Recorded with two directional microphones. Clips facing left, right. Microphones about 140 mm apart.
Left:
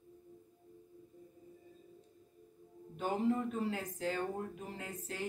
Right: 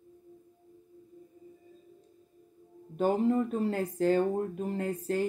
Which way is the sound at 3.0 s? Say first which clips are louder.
Right 7 dB; 35° right (ahead or behind).